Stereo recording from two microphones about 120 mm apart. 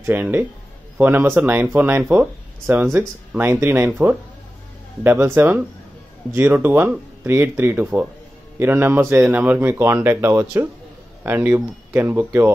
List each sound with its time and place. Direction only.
0.0 s a man's voice: 15° right (ahead or behind)